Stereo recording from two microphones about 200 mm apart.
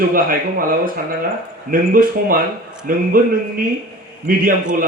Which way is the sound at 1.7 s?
45° right (ahead or behind).